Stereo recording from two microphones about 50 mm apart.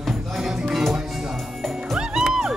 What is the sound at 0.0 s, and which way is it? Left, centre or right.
Music, centre.